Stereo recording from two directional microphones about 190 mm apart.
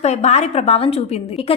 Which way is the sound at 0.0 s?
35° left (ahead or behind).